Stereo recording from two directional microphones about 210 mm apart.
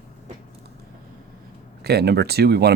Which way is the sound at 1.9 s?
50° right (ahead or behind).